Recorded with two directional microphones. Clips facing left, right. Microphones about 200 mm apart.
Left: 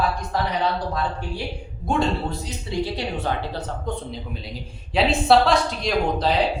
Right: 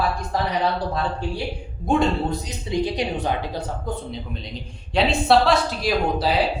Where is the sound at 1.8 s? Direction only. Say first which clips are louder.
Right 3 dB; 15° right (ahead or behind).